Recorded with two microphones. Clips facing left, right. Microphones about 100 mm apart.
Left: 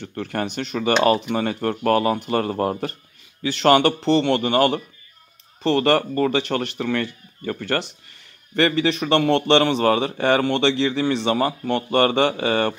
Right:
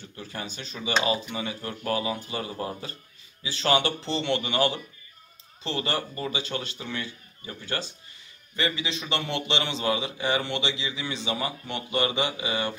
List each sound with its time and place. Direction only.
0.0 s speech: 65° left (ahead or behind)